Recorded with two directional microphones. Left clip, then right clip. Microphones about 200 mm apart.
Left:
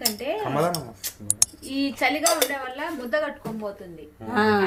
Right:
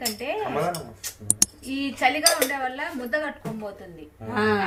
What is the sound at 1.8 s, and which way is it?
Speech, 25° left (ahead or behind).